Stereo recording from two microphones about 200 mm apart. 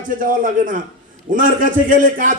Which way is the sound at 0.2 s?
40° right (ahead or behind).